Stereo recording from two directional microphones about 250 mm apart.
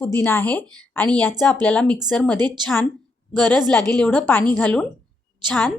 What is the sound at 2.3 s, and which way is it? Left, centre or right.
Speech, centre.